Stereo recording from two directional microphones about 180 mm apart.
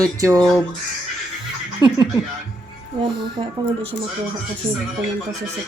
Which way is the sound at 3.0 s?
25° right (ahead or behind).